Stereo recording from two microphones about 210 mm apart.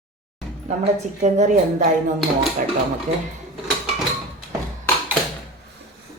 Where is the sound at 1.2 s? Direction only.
35° right (ahead or behind).